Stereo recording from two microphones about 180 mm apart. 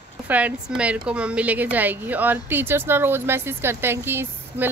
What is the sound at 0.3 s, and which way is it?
A woman's voice, 10° right (ahead or behind).